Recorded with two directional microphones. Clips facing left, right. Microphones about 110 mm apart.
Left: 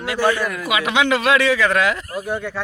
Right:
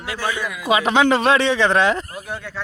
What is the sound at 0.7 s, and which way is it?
Speech, 35° right (ahead or behind).